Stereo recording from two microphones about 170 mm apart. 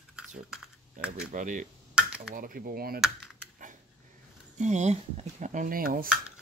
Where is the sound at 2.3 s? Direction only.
60° right (ahead or behind).